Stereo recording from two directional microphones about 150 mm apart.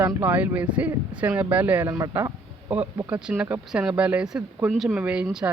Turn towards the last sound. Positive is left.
turn(degrees=-5)  # may be behind; listen again after turning